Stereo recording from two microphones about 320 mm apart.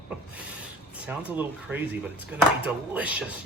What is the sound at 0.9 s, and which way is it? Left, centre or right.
Speech, centre.